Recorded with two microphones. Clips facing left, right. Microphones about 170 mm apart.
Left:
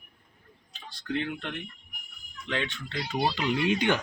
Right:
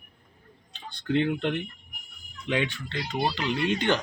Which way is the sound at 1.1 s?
25° right (ahead or behind).